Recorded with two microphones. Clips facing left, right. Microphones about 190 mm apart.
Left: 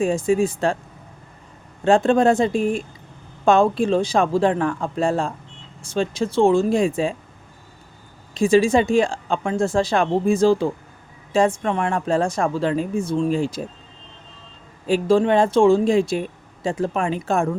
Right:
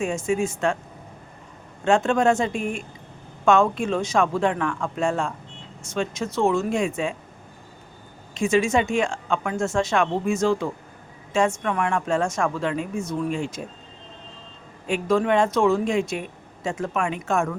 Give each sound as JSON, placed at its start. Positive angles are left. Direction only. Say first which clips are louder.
{"t": 0.0, "sound": "speech", "louder": "left 5 dB", "side_deg": 35}
{"t": 1.8, "sound": "speech", "louder": "left 4 dB", "side_deg": 35}
{"t": 8.3, "sound": "speech", "louder": "left 5 dB", "side_deg": 35}
{"t": 14.8, "sound": "speech", "louder": "left 4 dB", "side_deg": 30}